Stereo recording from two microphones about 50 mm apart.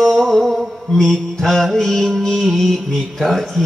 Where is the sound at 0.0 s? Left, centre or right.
Centre.